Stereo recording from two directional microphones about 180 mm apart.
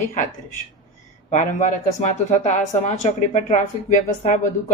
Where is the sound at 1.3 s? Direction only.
45° left (ahead or behind).